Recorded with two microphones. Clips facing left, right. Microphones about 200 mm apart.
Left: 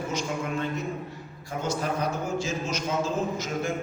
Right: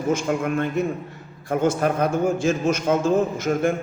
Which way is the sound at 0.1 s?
55° right (ahead or behind).